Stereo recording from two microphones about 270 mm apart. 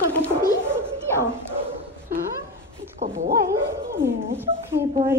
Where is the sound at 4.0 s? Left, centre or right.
Centre.